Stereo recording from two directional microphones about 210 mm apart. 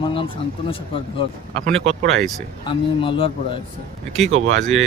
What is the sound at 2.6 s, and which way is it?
Speech, 25° left (ahead or behind).